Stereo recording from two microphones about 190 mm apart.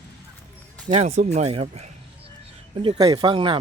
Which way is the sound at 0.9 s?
35° right (ahead or behind).